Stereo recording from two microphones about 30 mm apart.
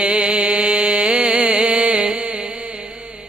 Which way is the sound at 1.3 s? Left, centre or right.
Right.